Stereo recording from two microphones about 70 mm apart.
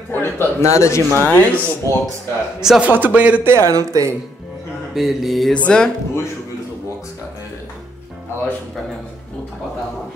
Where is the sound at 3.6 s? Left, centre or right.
Right.